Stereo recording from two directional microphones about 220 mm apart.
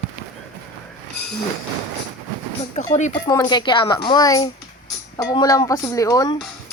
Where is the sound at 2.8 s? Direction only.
30° left (ahead or behind).